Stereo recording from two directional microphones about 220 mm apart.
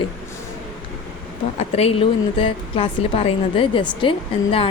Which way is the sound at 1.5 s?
30° left (ahead or behind).